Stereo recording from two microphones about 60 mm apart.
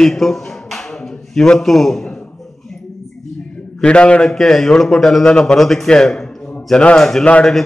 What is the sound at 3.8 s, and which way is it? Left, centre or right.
Speech, centre.